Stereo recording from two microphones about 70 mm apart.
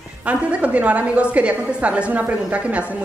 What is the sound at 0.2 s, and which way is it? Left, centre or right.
A woman's voice, centre.